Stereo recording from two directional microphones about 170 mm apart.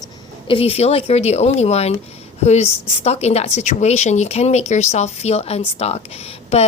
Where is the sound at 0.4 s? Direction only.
35° left (ahead or behind).